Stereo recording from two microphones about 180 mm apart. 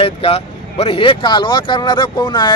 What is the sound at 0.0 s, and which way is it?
Speech, 35° left (ahead or behind).